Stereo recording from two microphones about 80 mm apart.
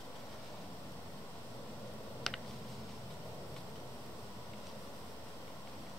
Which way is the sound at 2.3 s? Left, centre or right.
Centre.